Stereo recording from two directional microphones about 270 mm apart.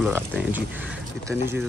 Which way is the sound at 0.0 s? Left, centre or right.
Centre.